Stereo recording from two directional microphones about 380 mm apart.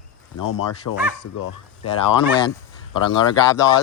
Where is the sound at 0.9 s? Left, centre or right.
Left.